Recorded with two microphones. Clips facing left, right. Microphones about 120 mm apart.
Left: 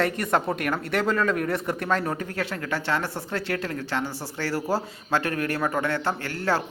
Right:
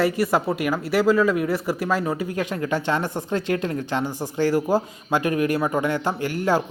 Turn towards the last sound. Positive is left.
turn(degrees=-15)  # may be behind; listen again after turning